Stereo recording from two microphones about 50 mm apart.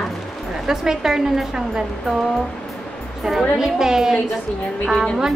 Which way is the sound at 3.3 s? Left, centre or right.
Centre.